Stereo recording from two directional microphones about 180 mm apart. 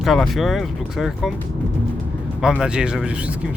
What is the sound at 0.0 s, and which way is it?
Speech, centre (ahead or behind).